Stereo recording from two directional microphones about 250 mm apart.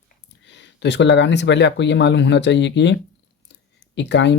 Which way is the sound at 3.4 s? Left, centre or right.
Left.